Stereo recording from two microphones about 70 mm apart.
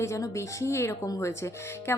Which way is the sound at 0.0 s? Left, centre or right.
Left.